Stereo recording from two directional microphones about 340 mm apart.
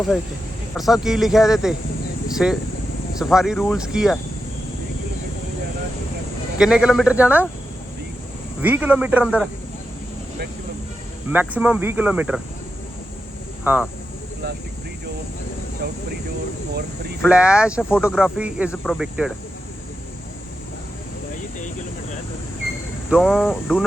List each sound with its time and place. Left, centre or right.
0.8 s speech: centre
6.6 s speech: centre
8.6 s speech: centre
11.3 s speech: centre
15.8 s speech: right
17.2 s speech: centre
23.0 s speech: centre